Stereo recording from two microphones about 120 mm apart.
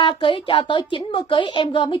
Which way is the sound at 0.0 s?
40° left (ahead or behind).